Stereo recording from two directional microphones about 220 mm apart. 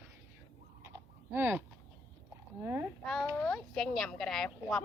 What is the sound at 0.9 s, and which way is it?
Typing, 10° right (ahead or behind).